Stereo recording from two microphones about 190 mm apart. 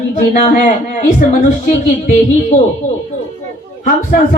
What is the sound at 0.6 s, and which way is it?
Speech, 40° left (ahead or behind).